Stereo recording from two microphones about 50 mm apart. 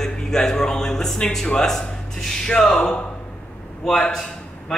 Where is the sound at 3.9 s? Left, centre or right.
Centre.